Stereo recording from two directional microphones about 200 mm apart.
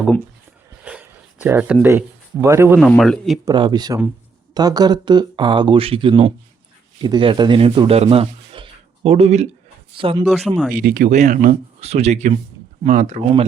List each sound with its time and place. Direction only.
0.9 s a sound: 5° right (ahead or behind)
2.7 s a man's voice: centre (ahead or behind)
3.4 s speech: 20° right (ahead or behind)
10.7 s speech: 45° right (ahead or behind)